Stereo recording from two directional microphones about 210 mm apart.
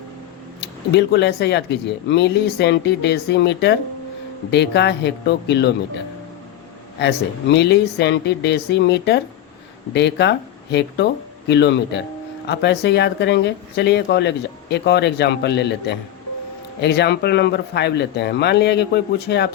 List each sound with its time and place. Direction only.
0.6 s speech: 55° left (ahead or behind)
7.0 s speech: 55° left (ahead or behind)